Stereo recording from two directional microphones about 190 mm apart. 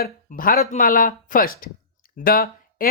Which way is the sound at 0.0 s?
50° left (ahead or behind).